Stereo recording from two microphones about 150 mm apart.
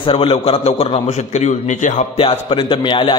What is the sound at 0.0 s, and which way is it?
A man's voice, 35° left (ahead or behind).